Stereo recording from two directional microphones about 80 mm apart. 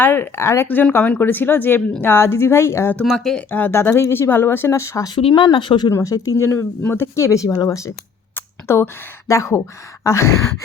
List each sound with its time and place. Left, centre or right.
0.0 s speech: left
0.9 s speech: left
3.2 s speech: centre
3.5 s speech: left
5.0 s speech: left
5.9 s speech: left
6.3 s speech: left
7.5 s speech: left
8.4 s speech: left